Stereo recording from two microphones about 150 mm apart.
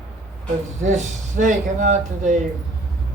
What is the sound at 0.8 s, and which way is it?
Speech, 55° right (ahead or behind).